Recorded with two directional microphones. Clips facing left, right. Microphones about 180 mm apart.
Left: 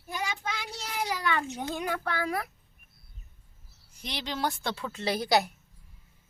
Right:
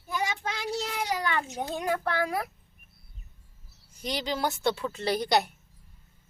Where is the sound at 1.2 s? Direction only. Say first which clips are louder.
Even; 35° right (ahead or behind).